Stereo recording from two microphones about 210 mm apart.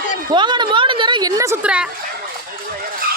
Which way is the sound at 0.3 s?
20° right (ahead or behind).